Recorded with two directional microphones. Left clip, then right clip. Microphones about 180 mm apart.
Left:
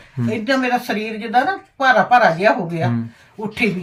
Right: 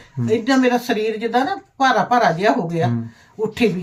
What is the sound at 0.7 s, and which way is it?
Speech, 35° right (ahead or behind).